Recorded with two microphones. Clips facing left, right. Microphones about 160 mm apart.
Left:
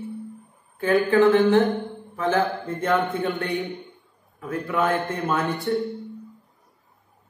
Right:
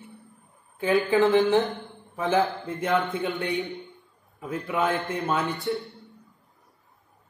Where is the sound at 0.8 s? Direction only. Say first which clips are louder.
Left 3 dB; 20° right (ahead or behind).